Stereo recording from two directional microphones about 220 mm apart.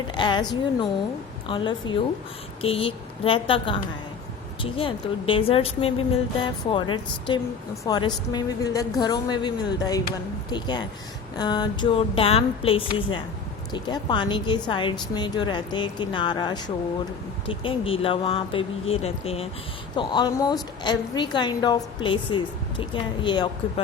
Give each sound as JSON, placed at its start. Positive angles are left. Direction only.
{"t": 0.2, "sound": "a woman's voice", "side_deg": 20}
{"t": 1.5, "sound": "a woman's voice", "side_deg": 25}